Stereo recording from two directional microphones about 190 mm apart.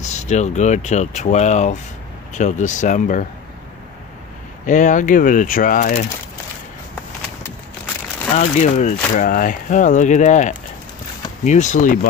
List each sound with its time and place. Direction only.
0.0 s speech: 35° left (ahead or behind)
4.6 s speech: 40° left (ahead or behind)
8.4 s speech: 35° left (ahead or behind)